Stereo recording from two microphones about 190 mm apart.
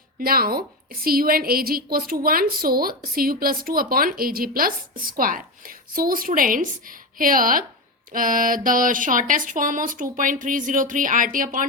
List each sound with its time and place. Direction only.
0.2 s a woman's voice: 50° right (ahead or behind)